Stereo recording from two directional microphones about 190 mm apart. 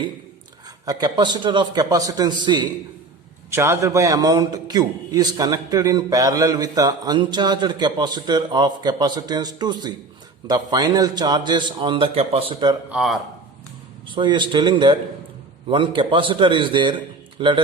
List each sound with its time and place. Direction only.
0.9 s a man's voice: 20° right (ahead or behind)
12.9 s a man's voice: centre (ahead or behind)
14.1 s a man's voice: 25° right (ahead or behind)